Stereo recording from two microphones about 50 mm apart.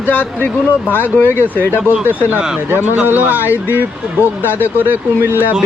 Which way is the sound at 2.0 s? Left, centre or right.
Right.